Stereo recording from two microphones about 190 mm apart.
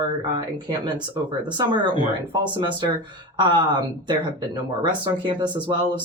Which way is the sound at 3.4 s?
25° right (ahead or behind).